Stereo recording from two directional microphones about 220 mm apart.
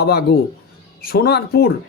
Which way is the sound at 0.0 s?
45° left (ahead or behind).